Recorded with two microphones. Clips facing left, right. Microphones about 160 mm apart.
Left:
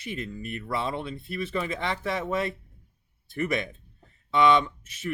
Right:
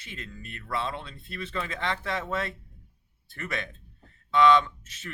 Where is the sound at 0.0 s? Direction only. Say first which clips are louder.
Left 8 dB; 15° left (ahead or behind).